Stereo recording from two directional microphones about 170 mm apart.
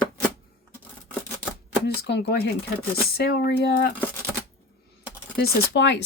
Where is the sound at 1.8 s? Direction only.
75° left (ahead or behind).